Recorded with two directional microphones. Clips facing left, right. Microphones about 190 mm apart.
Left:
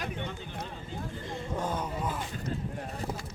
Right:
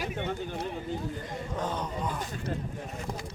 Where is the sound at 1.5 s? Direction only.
10° left (ahead or behind).